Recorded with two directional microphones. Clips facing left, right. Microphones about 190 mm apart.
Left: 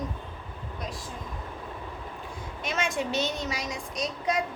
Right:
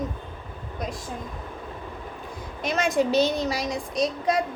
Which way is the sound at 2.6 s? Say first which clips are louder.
Right 7 dB; 35° right (ahead or behind).